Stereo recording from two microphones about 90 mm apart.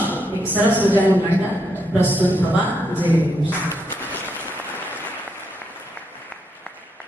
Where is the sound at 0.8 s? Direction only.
20° left (ahead or behind).